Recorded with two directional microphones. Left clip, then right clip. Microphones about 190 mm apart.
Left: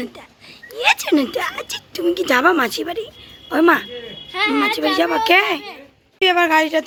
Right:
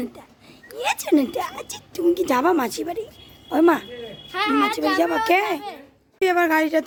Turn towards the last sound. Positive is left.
turn(degrees=-15)  # may be behind; listen again after turning